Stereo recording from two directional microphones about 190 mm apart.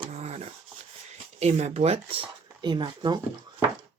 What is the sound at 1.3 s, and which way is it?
Speech, 35° right (ahead or behind).